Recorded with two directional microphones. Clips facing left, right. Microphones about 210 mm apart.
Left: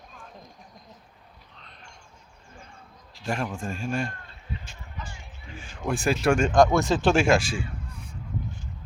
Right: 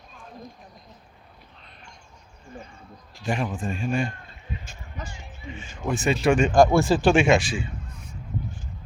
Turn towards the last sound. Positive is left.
turn(degrees=-5)  # may be behind; listen again after turning